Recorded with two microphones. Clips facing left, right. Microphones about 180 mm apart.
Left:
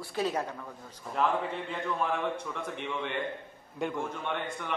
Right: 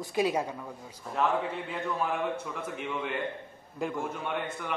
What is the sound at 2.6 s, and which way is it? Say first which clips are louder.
A man's voice: right 1 dB; 5° right (ahead or behind).